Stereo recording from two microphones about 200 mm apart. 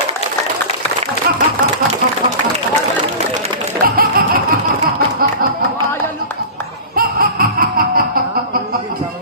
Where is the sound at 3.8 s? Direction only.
50° right (ahead or behind).